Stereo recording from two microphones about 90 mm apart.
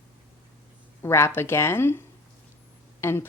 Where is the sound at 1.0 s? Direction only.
30° left (ahead or behind).